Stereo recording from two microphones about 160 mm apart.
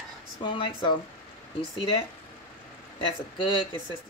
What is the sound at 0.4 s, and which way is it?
Speech, 30° left (ahead or behind).